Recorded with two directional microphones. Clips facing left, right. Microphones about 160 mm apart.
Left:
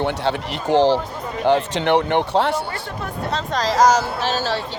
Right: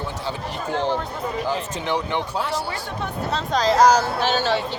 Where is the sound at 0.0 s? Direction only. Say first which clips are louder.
Left 7 dB; 80° left.